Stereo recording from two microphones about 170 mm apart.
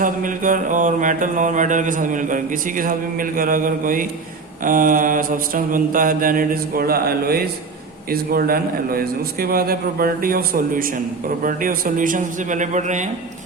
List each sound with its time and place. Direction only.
0.0 s mantra: 50° right (ahead or behind)
4.6 s a man's voice: 50° right (ahead or behind)
11.4 s mantra: 55° right (ahead or behind)